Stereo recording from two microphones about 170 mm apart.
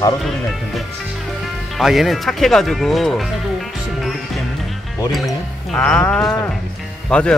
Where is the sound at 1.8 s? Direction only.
Centre (ahead or behind).